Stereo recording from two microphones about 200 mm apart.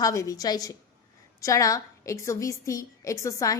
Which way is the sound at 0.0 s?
15° left (ahead or behind).